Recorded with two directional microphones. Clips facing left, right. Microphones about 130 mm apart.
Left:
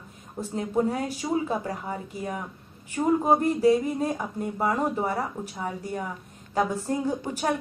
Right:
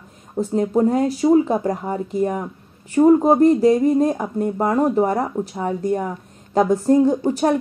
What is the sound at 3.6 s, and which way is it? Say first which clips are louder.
Speech: right 7 dB; 40° right (ahead or behind).